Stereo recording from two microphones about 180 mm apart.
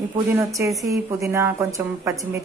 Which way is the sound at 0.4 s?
15° right (ahead or behind).